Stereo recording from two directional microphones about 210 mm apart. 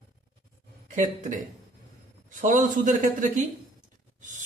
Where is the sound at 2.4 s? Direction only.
35° right (ahead or behind).